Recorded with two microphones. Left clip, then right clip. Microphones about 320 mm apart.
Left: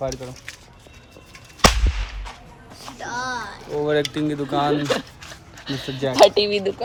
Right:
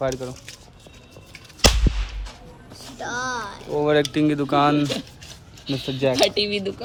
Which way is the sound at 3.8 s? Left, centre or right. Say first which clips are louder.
Right 2 dB; right.